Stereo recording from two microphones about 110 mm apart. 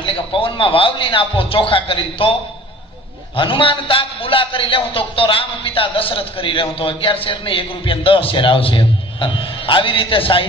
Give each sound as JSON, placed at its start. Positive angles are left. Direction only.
{"t": 0.0, "sound": "a man's voice", "side_deg": 50}
{"t": 3.3, "sound": "a man's voice", "side_deg": 50}